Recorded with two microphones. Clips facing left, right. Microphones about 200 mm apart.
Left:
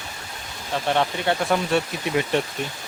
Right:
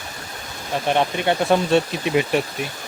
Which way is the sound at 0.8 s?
15° right (ahead or behind).